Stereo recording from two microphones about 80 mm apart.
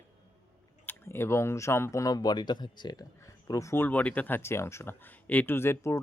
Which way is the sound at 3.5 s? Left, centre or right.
Left.